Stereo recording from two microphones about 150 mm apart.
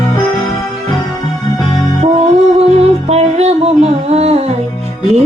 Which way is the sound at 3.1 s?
45° right (ahead or behind).